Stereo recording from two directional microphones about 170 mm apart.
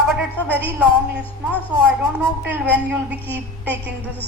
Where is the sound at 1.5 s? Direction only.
10° left (ahead or behind).